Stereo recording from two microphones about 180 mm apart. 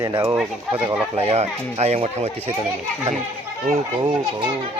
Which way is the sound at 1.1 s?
35° right (ahead or behind).